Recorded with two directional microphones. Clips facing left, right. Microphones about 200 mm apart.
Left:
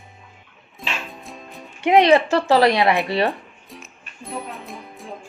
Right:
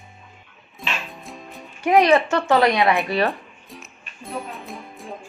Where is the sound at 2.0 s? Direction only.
30° left (ahead or behind).